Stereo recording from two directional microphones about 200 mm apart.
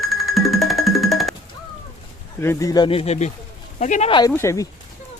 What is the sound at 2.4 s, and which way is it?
Speech, 15° left (ahead or behind).